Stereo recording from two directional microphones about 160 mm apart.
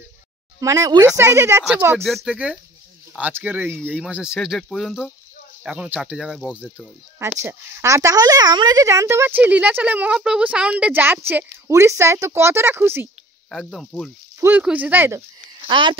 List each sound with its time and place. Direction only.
0.6 s a woman's voice: 20° right (ahead or behind)
2.0 s a woman's voice: centre (ahead or behind)
7.4 s a woman's voice: 20° right (ahead or behind)
13.5 s speech: centre (ahead or behind)
14.4 s a woman's voice: 10° right (ahead or behind)
15.6 s speech: 30° right (ahead or behind)